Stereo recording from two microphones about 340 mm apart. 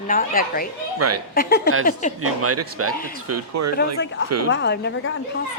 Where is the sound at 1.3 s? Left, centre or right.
Left.